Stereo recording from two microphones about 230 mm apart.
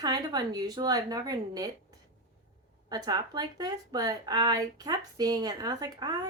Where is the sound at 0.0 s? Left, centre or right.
Centre.